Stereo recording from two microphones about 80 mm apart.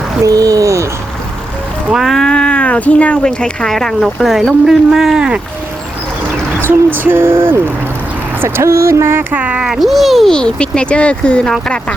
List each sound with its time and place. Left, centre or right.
0.3 s speech: right
1.9 s speech: centre
6.6 s speech: right
9.3 s speech: centre